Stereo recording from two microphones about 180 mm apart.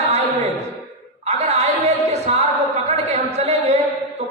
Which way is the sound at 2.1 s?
35° right (ahead or behind).